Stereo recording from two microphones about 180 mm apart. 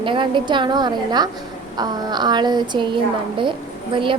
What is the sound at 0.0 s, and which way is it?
A woman's voice, 25° right (ahead or behind).